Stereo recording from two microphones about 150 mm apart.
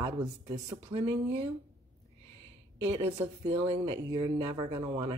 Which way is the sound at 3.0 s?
30° right (ahead or behind).